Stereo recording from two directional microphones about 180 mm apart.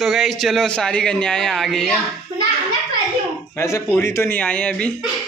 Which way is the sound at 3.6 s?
15° left (ahead or behind).